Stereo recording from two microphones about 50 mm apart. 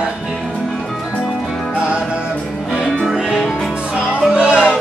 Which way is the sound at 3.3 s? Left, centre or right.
Centre.